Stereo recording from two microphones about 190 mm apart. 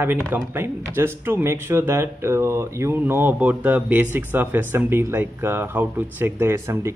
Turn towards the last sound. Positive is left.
turn(degrees=-15)  # may be behind; listen again after turning